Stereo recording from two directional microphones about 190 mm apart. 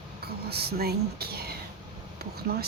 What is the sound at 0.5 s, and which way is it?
Speech, 55° right (ahead or behind).